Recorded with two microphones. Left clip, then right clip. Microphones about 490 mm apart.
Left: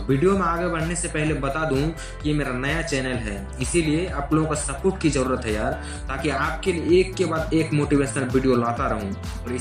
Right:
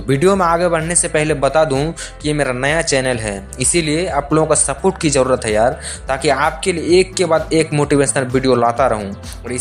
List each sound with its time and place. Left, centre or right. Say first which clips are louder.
0.1 s speech: right 8 dB; right